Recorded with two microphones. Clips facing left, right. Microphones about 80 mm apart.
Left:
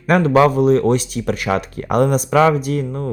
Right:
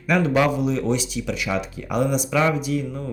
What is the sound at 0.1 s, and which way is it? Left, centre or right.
Speech, left.